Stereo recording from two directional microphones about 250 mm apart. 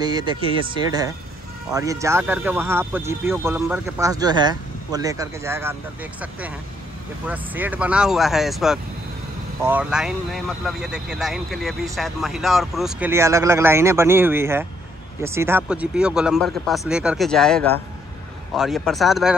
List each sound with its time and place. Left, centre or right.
0.0 s speech: centre
7.2 s speech: centre